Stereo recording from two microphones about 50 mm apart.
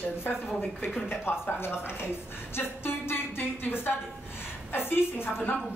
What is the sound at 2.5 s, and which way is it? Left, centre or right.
A woman's voice, left.